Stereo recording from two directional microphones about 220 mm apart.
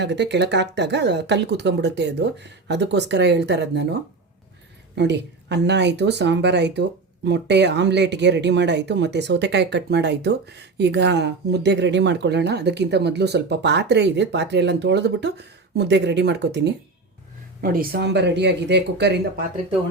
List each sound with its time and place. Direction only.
0.0 s speech: 50° right (ahead or behind)
4.9 s speech: 50° right (ahead or behind)
17.6 s speech: 40° right (ahead or behind)